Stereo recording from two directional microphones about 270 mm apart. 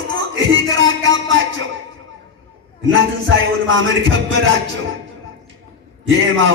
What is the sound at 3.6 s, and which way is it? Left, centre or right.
Speech, right.